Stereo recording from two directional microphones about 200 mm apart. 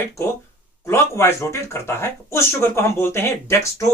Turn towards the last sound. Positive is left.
turn(degrees=15)  # may be behind; listen again after turning